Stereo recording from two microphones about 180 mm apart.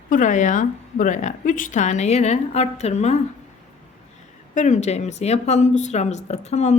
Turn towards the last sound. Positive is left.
turn(degrees=40)  # may be behind; listen again after turning